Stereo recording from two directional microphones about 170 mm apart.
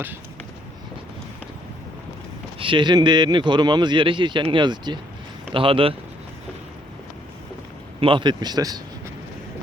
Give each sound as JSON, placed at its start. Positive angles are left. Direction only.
{"t": 2.6, "sound": "speech", "side_deg": -30}
{"t": 8.0, "sound": "speech", "side_deg": -30}